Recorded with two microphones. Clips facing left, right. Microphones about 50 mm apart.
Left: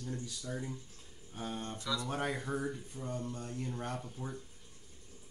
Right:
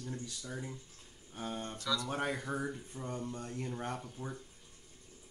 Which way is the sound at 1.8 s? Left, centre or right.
Left.